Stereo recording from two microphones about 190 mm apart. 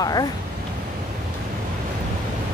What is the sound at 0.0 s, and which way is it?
Speech, 20° left (ahead or behind).